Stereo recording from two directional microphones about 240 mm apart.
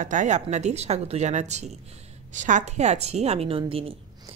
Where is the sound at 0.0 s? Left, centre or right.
Right.